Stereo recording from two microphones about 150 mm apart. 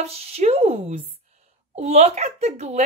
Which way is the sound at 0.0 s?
45° right (ahead or behind).